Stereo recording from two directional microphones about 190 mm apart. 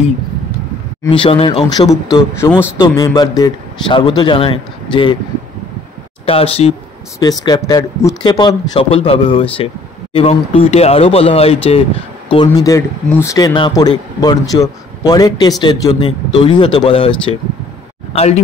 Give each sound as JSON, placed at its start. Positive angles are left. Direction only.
{"t": 1.1, "sound": "speech", "side_deg": 25}
{"t": 6.2, "sound": "speech", "side_deg": 30}
{"t": 7.2, "sound": "speech", "side_deg": 20}
{"t": 18.1, "sound": "speech", "side_deg": 35}